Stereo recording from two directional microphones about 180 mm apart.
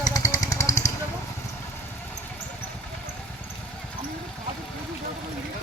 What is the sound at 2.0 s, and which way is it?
Vehicle, 10° left (ahead or behind).